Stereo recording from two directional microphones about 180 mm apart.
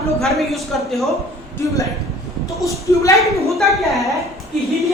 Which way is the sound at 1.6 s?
15° left (ahead or behind).